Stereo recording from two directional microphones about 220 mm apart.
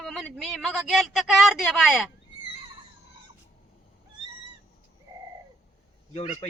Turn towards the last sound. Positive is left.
turn(degrees=30)  # may be behind; listen again after turning